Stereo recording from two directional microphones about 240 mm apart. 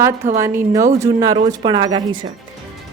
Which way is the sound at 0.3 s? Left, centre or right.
Centre.